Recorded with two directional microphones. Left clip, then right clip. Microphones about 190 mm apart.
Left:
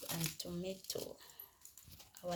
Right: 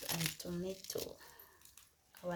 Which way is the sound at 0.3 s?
15° left (ahead or behind).